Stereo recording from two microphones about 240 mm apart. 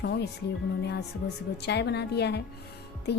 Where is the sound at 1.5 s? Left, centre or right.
Left.